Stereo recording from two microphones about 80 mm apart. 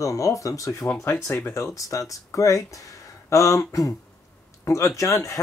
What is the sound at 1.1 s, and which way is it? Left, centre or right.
Speech, left.